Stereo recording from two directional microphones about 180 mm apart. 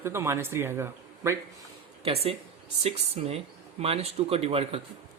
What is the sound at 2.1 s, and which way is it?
Speech, 35° right (ahead or behind).